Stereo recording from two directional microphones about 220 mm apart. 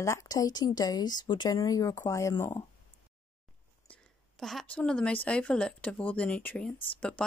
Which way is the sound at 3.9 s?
Centre (ahead or behind).